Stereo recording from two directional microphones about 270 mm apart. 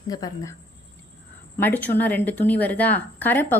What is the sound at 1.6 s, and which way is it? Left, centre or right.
Speech, centre.